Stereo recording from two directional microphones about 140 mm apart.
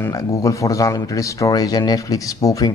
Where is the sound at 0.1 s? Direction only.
25° left (ahead or behind).